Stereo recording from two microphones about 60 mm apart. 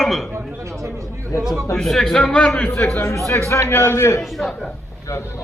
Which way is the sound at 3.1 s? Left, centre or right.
Left.